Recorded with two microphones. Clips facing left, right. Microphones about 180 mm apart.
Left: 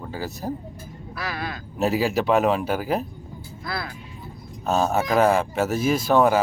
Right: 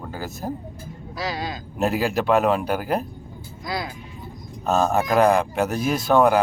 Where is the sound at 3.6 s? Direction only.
15° right (ahead or behind).